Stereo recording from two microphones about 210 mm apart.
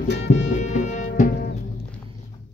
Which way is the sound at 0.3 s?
35° left (ahead or behind).